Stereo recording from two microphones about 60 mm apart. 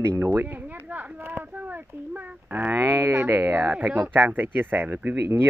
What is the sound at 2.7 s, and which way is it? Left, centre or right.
Speech, right.